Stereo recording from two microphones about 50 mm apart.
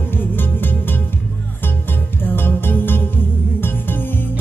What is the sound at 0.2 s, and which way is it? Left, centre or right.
Music, left.